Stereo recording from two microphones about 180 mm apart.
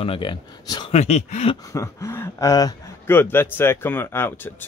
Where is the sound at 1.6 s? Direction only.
20° left (ahead or behind).